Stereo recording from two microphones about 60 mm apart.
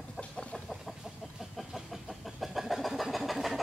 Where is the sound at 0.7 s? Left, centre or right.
Centre.